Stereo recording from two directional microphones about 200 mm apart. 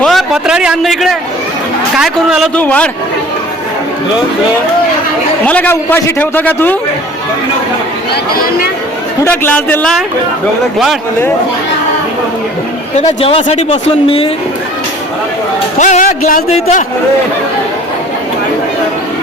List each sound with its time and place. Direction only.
0.0 s a man's voice: centre (ahead or behind)
5.5 s a man's voice: 10° left (ahead or behind)
9.2 s a man's voice: 10° left (ahead or behind)
13.0 s speech: 30° left (ahead or behind)
15.8 s speech: 40° left (ahead or behind)